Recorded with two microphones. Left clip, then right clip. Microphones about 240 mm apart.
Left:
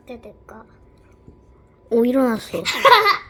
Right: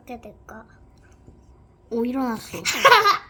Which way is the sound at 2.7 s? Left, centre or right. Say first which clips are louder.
Left 2 dB; right.